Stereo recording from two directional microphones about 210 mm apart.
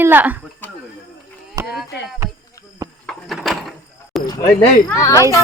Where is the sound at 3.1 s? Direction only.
Centre (ahead or behind).